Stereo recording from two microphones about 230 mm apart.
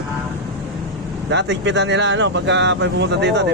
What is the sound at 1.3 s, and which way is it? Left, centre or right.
Speech, right.